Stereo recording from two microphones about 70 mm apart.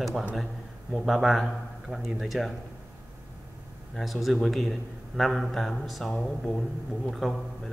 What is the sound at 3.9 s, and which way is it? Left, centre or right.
A man's voice, centre.